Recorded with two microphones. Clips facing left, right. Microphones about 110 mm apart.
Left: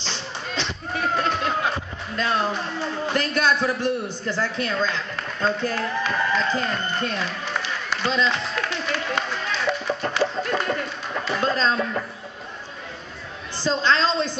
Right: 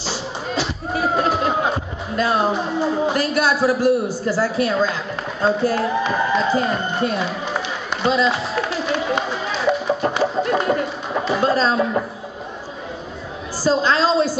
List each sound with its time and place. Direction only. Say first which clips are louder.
0.0 s music: right 6 dB; 10° right (ahead or behind)
2.1 s a man's voice: right 5 dB; 10° right (ahead or behind)
5.9 s speech: right 5 dB; 30° right (ahead or behind)
6.2 s speech: right 5 dB; 10° right (ahead or behind)
8.1 s a sound: right 5 dB; 10° right (ahead or behind)
9.2 s run: right 4 dB; 5° right (ahead or behind)
10.0 s chicken: right 3 dB; 10° right (ahead or behind)
10.7 s music: right 6 dB; 20° right (ahead or behind)
13.7 s a man's voice: right 4 dB; 10° right (ahead or behind)